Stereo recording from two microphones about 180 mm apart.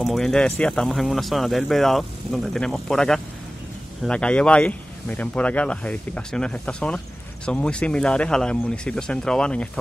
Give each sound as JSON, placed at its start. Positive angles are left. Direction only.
{"t": 0.0, "sound": "speech", "side_deg": 0}